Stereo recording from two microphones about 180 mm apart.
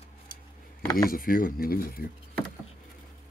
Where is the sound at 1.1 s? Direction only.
50° left (ahead or behind).